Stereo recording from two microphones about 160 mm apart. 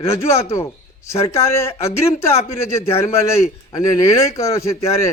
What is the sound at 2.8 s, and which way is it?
Speech, 40° left (ahead or behind).